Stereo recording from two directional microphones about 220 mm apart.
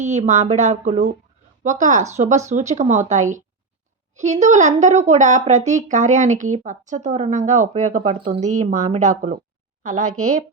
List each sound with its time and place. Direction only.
0.0 s speech: 30° right (ahead or behind)
10.0 s a woman's voice: 85° right